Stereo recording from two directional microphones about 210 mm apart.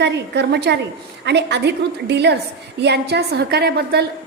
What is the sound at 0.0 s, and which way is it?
A woman's voice, 55° right (ahead or behind).